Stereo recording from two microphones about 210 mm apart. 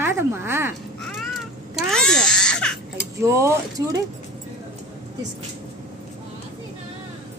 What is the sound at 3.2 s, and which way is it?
Speech, 15° right (ahead or behind).